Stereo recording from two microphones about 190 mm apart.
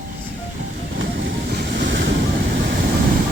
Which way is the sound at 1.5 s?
65° right (ahead or behind).